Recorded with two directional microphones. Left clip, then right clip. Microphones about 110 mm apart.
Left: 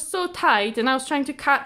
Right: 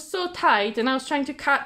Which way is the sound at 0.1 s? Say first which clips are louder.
Left 1 dB; 30° left (ahead or behind).